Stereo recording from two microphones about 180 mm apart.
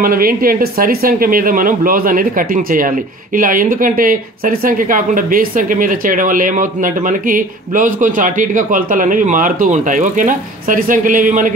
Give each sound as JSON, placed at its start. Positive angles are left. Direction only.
{"t": 0.0, "sound": "speech", "side_deg": -55}